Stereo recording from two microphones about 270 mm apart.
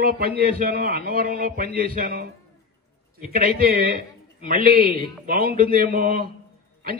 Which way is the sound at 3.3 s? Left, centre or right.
Right.